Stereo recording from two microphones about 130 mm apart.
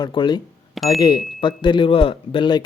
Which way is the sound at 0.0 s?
35° left (ahead or behind).